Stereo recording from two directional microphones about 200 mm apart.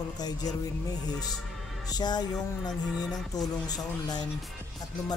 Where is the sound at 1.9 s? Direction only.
20° left (ahead or behind).